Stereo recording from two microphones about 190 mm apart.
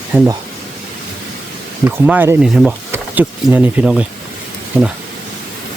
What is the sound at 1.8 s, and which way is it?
Speech, 10° right (ahead or behind).